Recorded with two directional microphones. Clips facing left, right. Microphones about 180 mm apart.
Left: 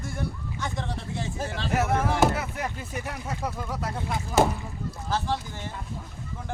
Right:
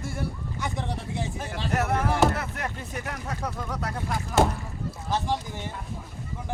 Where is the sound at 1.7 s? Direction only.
5° left (ahead or behind).